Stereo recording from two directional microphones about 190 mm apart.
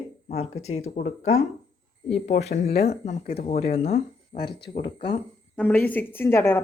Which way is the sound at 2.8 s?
35° left (ahead or behind).